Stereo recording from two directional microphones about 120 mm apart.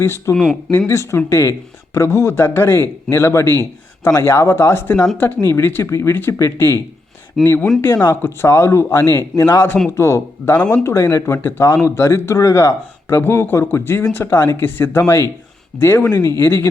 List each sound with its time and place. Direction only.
0.0 s speech: 20° left (ahead or behind)